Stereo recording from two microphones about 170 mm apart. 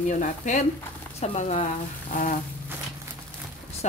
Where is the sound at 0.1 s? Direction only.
45° left (ahead or behind).